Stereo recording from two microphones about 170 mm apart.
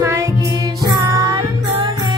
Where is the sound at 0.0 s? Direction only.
15° right (ahead or behind).